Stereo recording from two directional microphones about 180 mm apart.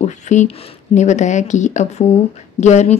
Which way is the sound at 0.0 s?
40° left (ahead or behind).